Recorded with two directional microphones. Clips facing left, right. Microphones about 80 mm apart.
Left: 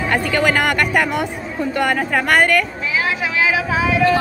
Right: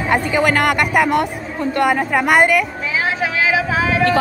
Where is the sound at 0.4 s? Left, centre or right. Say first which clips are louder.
Right 1 dB; centre.